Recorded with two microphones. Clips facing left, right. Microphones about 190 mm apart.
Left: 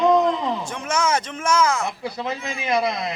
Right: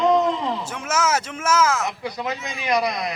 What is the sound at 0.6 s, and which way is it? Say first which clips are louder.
A man's voice: even; 5° right (ahead or behind).